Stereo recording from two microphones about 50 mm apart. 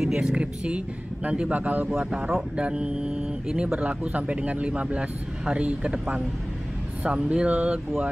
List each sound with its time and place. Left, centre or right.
0.0 s a sound: centre
0.3 s speech: right
1.5 s speech: right
1.9 s speech: centre; by 7.8 s right